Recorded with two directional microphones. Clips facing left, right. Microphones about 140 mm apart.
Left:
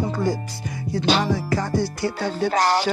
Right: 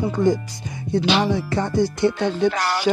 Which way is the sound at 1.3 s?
25° right (ahead or behind).